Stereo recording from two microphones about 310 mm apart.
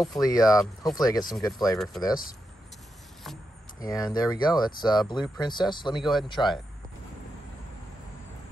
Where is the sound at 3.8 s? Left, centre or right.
Centre.